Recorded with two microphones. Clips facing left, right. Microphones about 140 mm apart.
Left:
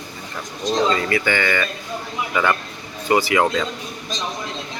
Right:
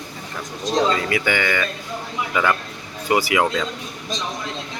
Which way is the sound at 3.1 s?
10° right (ahead or behind).